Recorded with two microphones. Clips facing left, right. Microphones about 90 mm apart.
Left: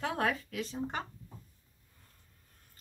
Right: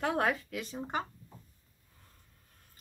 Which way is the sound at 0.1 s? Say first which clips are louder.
Right 2 dB; 20° right (ahead or behind).